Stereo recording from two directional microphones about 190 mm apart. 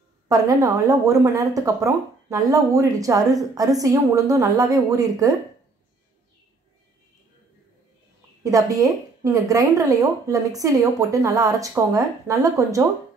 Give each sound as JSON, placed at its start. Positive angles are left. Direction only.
{"t": 0.3, "sound": "speech", "side_deg": -15}
{"t": 8.5, "sound": "speech", "side_deg": -15}